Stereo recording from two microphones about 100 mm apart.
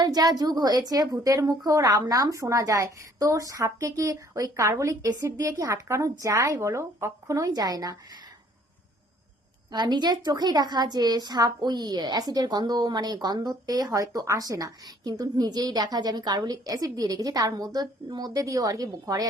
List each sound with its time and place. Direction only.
0.0 s a woman's voice: 40° right (ahead or behind)
9.7 s a woman's voice: 45° right (ahead or behind)